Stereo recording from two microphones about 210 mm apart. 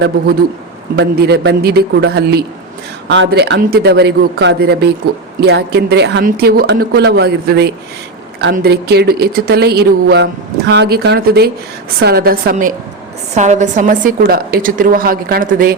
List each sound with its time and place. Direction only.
0.9 s a woman's voice: 50° right (ahead or behind)